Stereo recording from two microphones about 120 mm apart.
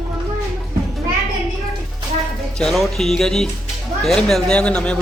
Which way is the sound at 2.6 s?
5° left (ahead or behind).